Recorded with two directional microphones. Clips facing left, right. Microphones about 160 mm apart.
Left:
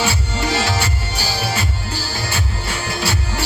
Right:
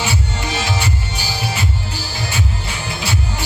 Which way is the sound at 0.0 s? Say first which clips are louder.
Left 2 dB; 20° right (ahead or behind).